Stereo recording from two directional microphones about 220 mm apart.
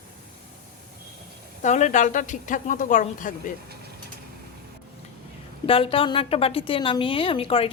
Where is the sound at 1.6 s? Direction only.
35° left (ahead or behind).